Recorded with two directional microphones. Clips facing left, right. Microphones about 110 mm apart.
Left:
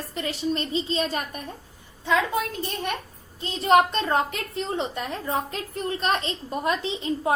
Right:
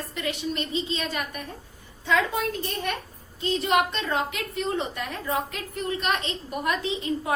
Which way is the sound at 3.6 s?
40° left (ahead or behind).